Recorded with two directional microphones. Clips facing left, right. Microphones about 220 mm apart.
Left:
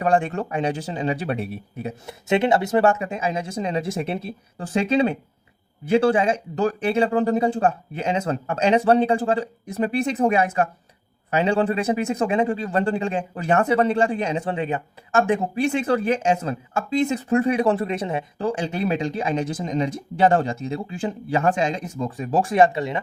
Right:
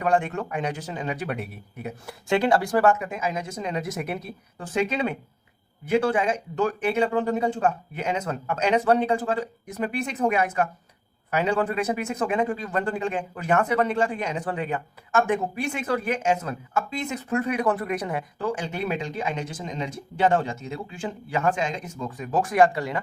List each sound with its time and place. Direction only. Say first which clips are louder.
0.0 s speech: left 3 dB; 30° left (ahead or behind)